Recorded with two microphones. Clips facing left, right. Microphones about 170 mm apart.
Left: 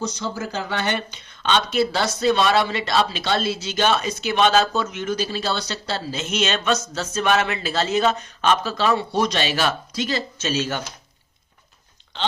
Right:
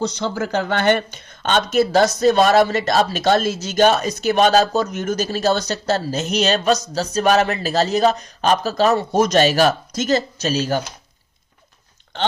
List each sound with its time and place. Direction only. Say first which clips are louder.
0.0 s speech: right 5 dB; 60° right (ahead or behind); by 10.8 s 35° right (ahead or behind)